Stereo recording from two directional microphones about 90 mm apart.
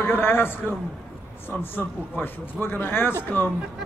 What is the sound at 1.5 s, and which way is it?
A man's voice, 20° left (ahead or behind).